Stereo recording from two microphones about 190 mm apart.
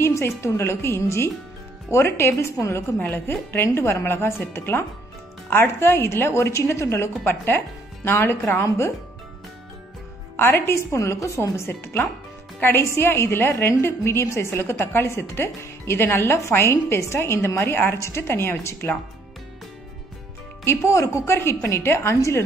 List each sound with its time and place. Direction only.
0.0 s a woman's voice: 15° left (ahead or behind)
10.3 s a woman's voice: 10° left (ahead or behind)
20.6 s a woman's voice: 15° left (ahead or behind)